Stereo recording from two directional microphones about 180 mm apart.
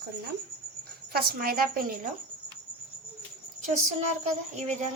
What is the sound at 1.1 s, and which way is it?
Speech, 55° right (ahead or behind).